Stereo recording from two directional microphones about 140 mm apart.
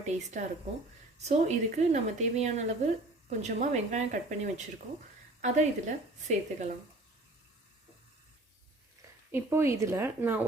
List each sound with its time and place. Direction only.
0.0 s a woman's voice: 55° right (ahead or behind)
9.3 s speech: 15° right (ahead or behind)